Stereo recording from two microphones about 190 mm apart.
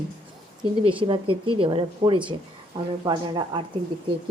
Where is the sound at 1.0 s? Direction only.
25° right (ahead or behind).